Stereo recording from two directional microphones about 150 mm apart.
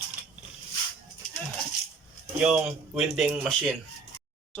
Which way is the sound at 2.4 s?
5° right (ahead or behind).